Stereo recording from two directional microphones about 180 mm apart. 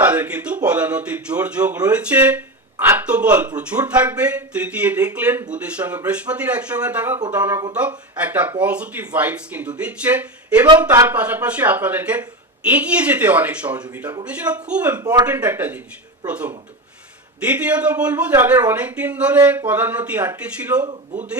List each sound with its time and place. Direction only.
0.0 s speech: 10° right (ahead or behind)
15.0 s speech: 20° right (ahead or behind)
15.3 s speech: 10° right (ahead or behind)